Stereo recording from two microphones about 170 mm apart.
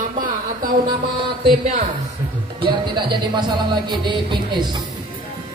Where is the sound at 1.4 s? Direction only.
30° right (ahead or behind).